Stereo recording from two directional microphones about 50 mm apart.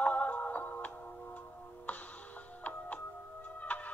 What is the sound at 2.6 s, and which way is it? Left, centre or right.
Music, left.